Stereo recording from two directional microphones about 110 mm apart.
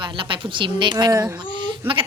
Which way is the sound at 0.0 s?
50° right (ahead or behind).